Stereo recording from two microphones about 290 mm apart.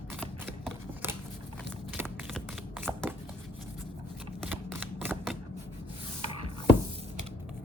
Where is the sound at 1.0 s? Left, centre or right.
Centre.